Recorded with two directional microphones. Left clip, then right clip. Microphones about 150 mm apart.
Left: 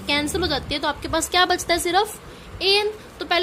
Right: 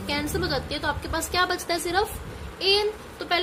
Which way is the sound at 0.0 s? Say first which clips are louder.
Left 5 dB; 50° left (ahead or behind).